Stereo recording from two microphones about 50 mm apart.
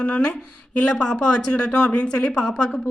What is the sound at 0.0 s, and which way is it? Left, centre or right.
Speech, left.